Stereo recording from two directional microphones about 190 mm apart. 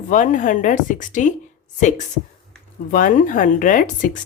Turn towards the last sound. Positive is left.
turn(degrees=45)  # may be behind; listen again after turning